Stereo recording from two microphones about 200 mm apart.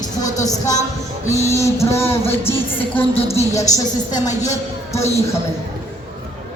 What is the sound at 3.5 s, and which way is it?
Speech, 15° left (ahead or behind).